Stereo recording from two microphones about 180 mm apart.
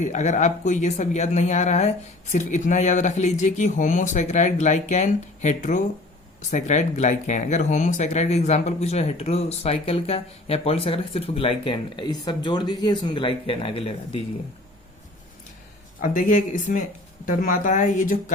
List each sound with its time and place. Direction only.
0.0 s speech: 40° left (ahead or behind)
16.0 s speech: 45° left (ahead or behind)